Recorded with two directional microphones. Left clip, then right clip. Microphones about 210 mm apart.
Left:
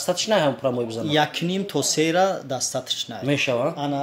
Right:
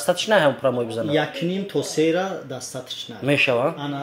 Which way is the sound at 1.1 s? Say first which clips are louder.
Left 4 dB; 30° left (ahead or behind).